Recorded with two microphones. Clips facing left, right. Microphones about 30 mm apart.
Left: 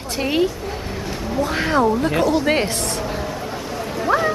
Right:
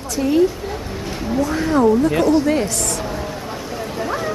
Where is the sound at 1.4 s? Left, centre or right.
Left.